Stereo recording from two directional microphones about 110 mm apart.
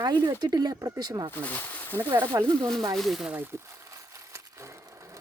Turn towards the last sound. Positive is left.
turn(degrees=-30)  # may be behind; listen again after turning